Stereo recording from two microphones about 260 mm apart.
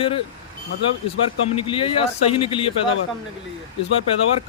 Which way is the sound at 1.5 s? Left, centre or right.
Left.